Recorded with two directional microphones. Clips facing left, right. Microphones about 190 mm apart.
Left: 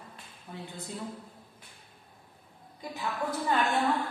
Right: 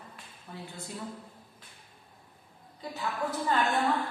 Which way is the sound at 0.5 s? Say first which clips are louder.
Left 1 dB; 15° left (ahead or behind).